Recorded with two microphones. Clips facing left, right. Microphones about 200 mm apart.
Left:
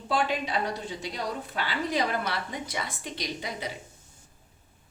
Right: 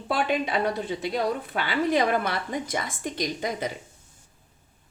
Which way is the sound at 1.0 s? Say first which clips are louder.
Right 8 dB; 55° right (ahead or behind).